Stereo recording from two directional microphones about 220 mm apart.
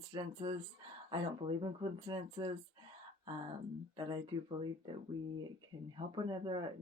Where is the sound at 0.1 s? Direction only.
20° right (ahead or behind).